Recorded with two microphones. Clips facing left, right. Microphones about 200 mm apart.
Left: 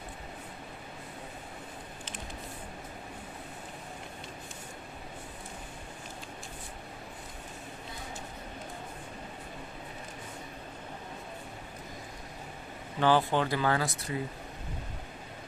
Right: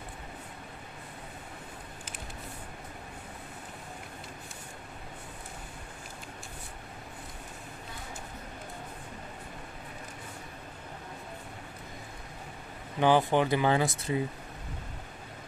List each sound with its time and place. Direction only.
13.0 s speech: 15° right (ahead or behind)